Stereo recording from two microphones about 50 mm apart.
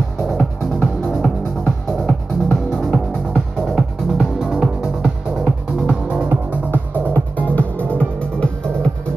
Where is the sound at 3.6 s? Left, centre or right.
Centre.